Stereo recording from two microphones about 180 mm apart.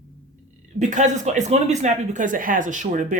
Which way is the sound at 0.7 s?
40° right (ahead or behind).